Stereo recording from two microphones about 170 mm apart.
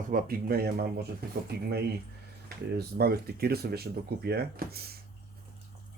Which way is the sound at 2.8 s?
70° right (ahead or behind).